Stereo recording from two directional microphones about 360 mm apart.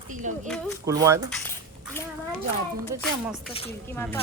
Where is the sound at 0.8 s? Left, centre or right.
Centre.